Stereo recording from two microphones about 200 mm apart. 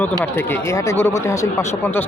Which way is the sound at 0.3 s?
10° left (ahead or behind).